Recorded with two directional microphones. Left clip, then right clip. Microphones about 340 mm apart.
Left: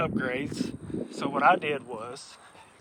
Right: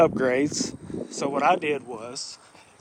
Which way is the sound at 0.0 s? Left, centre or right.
Centre.